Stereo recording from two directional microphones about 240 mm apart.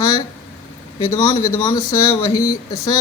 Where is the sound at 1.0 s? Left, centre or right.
Centre.